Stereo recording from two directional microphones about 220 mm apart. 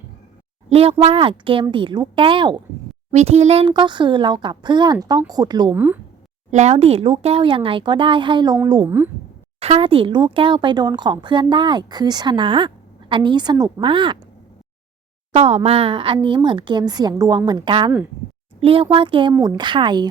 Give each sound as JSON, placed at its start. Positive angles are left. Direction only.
{"t": 0.7, "sound": "a woman's voice", "side_deg": -25}
{"t": 6.5, "sound": "a woman's voice", "side_deg": -30}
{"t": 9.6, "sound": "speech", "side_deg": -25}
{"t": 15.3, "sound": "speech", "side_deg": -25}